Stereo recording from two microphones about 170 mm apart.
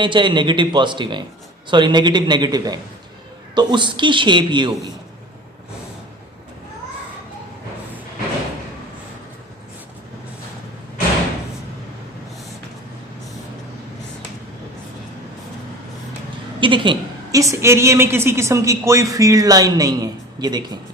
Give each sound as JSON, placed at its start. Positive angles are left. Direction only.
{"t": 0.0, "sound": "a woman's voice", "side_deg": -30}
{"t": 16.6, "sound": "a woman's voice", "side_deg": -30}